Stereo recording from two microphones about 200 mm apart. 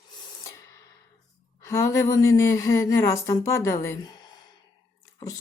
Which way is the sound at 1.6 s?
15° left (ahead or behind).